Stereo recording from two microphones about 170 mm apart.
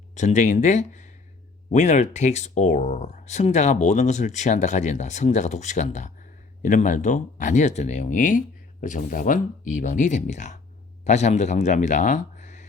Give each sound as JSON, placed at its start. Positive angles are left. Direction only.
{"t": 0.1, "sound": "speech", "side_deg": 45}